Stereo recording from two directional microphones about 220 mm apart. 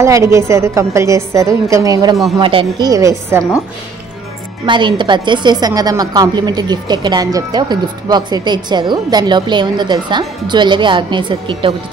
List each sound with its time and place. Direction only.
0.0 s a woman's voice: 15° right (ahead or behind)
4.6 s a woman's voice: 20° right (ahead or behind)